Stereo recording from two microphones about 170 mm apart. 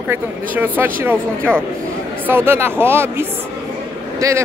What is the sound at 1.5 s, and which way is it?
Speech, 5° left (ahead or behind).